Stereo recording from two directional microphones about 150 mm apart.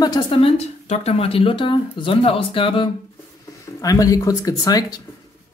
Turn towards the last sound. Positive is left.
turn(degrees=25)  # may be behind; listen again after turning